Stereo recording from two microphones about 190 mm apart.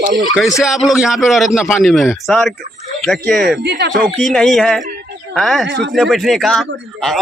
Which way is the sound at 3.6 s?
60° right (ahead or behind).